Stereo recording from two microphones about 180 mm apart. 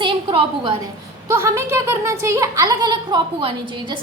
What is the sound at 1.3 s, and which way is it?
A woman's voice, 15° right (ahead or behind).